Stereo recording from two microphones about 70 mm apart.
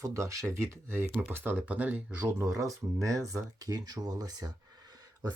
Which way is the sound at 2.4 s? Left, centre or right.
Right.